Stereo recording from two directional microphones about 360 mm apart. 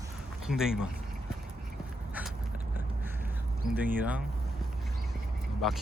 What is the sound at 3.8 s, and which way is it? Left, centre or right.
Speech, centre.